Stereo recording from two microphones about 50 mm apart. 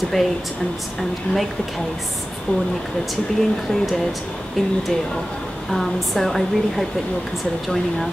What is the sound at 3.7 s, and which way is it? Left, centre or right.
Speech, centre.